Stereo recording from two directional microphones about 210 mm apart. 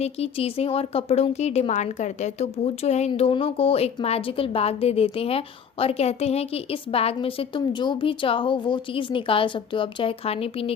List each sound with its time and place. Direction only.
0.0 s speech: 30° left (ahead or behind)